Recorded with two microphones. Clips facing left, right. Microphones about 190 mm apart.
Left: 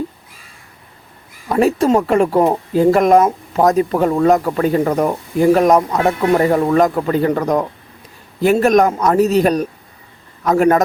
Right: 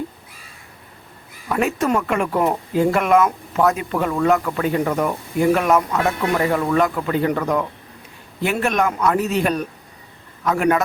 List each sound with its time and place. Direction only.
1.5 s speech: 35° left (ahead or behind)
8.6 s speech: 40° left (ahead or behind)